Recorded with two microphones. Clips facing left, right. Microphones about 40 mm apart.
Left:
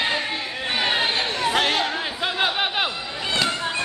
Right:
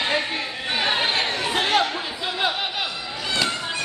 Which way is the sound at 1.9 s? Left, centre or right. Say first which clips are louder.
Left 2 dB; left.